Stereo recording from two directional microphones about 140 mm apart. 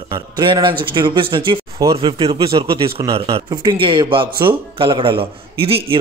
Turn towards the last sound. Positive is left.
turn(degrees=-40)  # may be behind; listen again after turning